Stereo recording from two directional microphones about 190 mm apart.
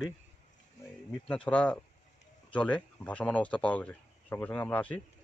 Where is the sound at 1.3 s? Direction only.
5° left (ahead or behind).